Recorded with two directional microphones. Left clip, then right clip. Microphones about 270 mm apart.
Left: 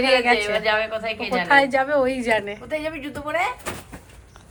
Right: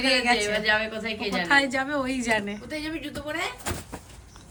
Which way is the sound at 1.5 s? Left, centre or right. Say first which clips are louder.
Left 6 dB; centre.